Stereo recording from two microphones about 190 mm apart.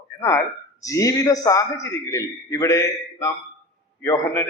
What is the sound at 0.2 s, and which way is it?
A man's voice, 15° left (ahead or behind).